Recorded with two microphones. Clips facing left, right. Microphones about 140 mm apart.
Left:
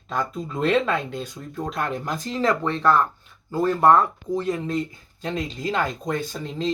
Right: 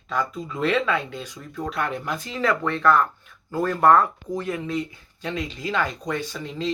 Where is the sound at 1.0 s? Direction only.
45° left (ahead or behind); by 4.0 s 20° left (ahead or behind).